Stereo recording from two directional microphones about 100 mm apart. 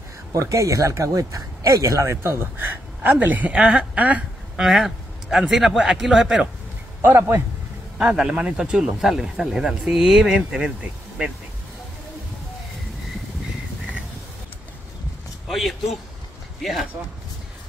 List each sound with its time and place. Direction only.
0.3 s speech: 35° right (ahead or behind); by 4.6 s 15° right (ahead or behind)
4.6 s speech: centre (ahead or behind)
7.0 s speech: 20° right (ahead or behind)
8.0 s speech: 5° right (ahead or behind)
15.4 s speech: centre (ahead or behind)